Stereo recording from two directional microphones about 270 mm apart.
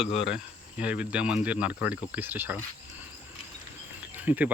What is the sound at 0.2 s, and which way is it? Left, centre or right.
Speech, centre.